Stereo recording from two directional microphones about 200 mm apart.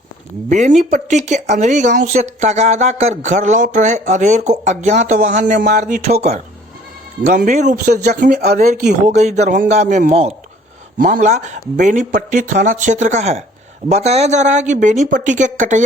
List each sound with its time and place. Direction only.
0.5 s speech: 35° right (ahead or behind)
8.7 s speech: 35° right (ahead or behind)